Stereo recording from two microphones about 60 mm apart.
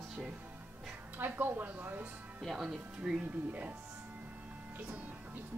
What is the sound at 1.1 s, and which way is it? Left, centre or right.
Speech, right.